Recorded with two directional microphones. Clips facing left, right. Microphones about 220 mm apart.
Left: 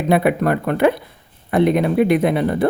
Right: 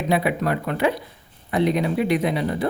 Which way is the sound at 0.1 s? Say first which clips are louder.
Left 6 dB; 55° left (ahead or behind).